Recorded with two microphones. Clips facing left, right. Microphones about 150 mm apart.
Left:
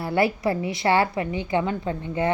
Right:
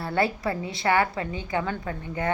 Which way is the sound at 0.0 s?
25° left (ahead or behind).